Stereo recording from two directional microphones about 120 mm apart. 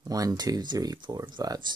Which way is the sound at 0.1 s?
30° right (ahead or behind).